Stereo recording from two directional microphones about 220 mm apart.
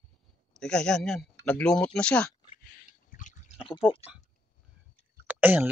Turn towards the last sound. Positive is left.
turn(degrees=-10)  # may be behind; listen again after turning